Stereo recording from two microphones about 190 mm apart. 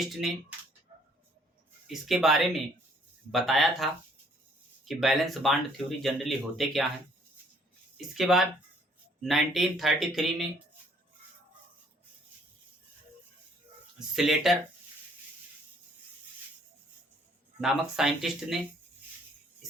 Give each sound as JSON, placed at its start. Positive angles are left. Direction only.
{"t": 0.0, "sound": "speech", "side_deg": 0}
{"t": 1.9, "sound": "speech", "side_deg": 0}
{"t": 7.9, "sound": "speech", "side_deg": 0}
{"t": 14.1, "sound": "speech", "side_deg": 0}
{"t": 17.6, "sound": "speech", "side_deg": 0}